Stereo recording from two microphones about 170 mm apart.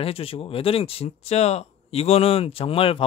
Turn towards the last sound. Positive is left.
turn(degrees=35)  # may be behind; listen again after turning